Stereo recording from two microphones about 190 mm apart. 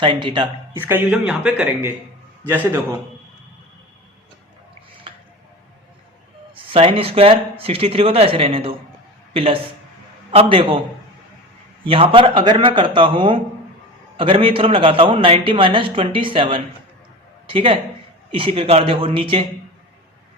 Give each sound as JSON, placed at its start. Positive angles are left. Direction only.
{"t": 0.0, "sound": "a man's voice", "side_deg": -25}
{"t": 0.8, "sound": "a man's voice", "side_deg": -10}
{"t": 5.1, "sound": "a sound", "side_deg": -25}
{"t": 6.5, "sound": "a man's voice", "side_deg": -30}
{"t": 11.9, "sound": "a man's voice", "side_deg": -30}